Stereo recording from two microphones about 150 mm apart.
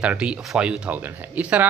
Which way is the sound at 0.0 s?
5° right (ahead or behind).